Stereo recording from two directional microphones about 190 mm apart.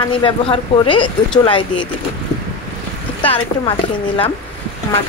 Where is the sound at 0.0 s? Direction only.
25° left (ahead or behind).